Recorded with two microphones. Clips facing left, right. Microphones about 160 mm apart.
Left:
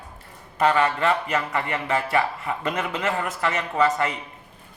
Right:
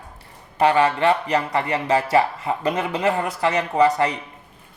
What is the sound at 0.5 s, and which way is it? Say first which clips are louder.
Speech: right 3 dB; 30° right (ahead or behind).